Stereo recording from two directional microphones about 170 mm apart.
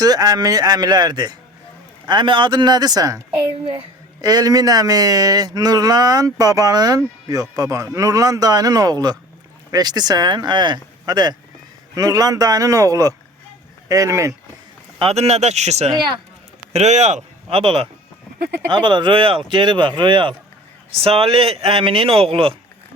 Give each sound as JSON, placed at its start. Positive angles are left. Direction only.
{"t": 0.0, "sound": "speech", "side_deg": -25}
{"t": 14.9, "sound": "speech", "side_deg": -35}
{"t": 15.9, "sound": "speech", "side_deg": -25}
{"t": 16.7, "sound": "speech", "side_deg": -40}